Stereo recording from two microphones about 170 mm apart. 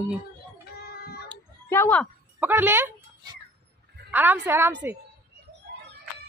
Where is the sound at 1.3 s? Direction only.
10° left (ahead or behind).